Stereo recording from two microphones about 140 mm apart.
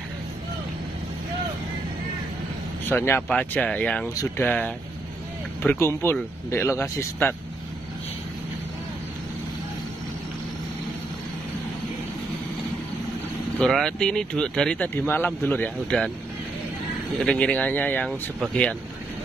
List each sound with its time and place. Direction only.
2.8 s speech: 15° left (ahead or behind)
13.6 s speech: 5° left (ahead or behind)
17.2 s speech: 10° left (ahead or behind)